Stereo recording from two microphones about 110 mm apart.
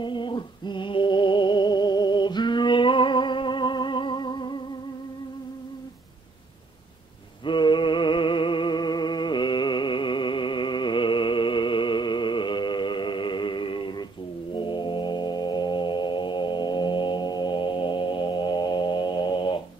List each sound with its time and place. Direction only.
0.0 s a sound: 45° left (ahead or behind)
7.4 s music: 45° left (ahead or behind)
14.5 s organ: 45° left (ahead or behind)